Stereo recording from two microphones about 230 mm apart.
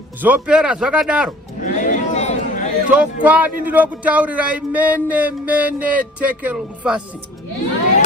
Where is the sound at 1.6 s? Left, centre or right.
Left.